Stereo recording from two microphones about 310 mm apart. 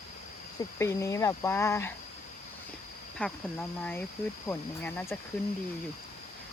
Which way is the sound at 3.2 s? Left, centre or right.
Centre.